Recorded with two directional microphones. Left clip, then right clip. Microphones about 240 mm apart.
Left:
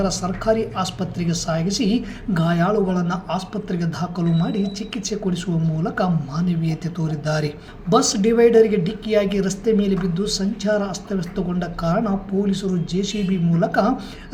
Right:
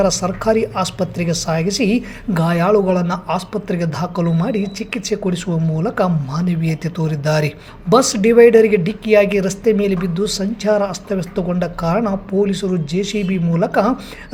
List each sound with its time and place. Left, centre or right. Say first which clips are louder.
0.0 s speech: right 6 dB; right